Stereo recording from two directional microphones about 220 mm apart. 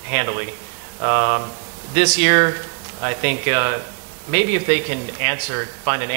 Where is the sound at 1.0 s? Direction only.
20° right (ahead or behind).